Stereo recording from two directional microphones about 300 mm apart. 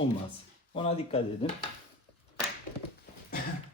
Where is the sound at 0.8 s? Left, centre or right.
Centre.